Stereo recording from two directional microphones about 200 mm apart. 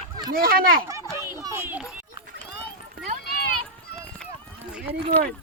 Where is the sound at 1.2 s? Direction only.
15° right (ahead or behind).